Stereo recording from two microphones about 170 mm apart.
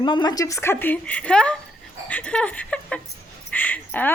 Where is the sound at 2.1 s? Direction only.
10° left (ahead or behind).